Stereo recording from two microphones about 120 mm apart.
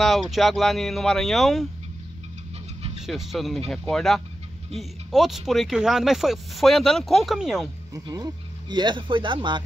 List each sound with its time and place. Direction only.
0.0 s speech: centre (ahead or behind)
3.0 s speech: centre (ahead or behind)
7.9 s speech: 30° right (ahead or behind)